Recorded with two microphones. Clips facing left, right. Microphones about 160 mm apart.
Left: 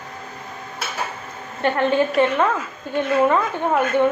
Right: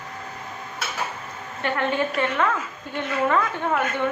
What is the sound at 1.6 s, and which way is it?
A woman's voice, 30° left (ahead or behind).